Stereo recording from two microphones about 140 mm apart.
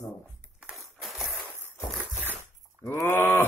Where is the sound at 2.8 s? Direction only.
20° left (ahead or behind).